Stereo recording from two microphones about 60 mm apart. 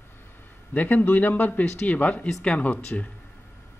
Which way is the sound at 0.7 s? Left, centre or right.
Left.